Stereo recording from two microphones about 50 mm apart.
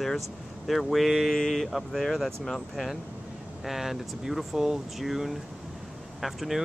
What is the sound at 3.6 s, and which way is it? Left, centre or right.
Speech, centre.